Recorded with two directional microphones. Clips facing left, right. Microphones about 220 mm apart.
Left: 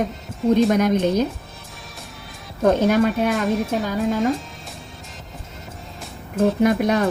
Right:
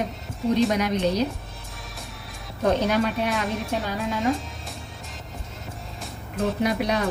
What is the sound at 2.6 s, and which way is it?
Speech, 50° left (ahead or behind).